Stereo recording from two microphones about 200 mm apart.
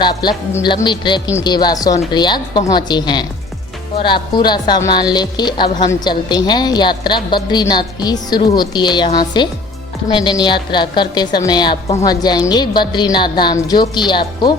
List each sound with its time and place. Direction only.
0.0 s a woman's voice: 20° left (ahead or behind)